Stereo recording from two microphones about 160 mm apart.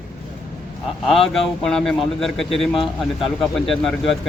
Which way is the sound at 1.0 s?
Centre (ahead or behind).